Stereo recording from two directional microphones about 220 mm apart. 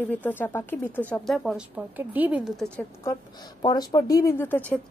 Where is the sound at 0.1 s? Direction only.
10° left (ahead or behind).